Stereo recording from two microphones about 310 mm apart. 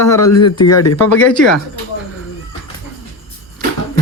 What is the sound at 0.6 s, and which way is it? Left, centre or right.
Speech, left.